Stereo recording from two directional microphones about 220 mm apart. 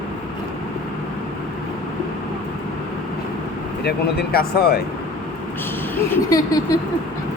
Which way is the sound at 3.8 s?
45° left (ahead or behind).